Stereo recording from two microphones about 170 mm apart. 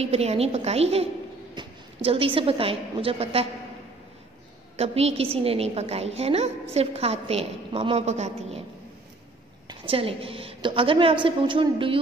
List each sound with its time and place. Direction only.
0.0 s a woman's voice: 35° right (ahead or behind)
2.0 s a woman's voice: 30° right (ahead or behind)
4.7 s a woman's voice: 40° right (ahead or behind)
9.7 s a woman's voice: 30° right (ahead or behind)